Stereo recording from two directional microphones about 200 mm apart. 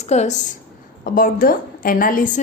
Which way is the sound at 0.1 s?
35° left (ahead or behind).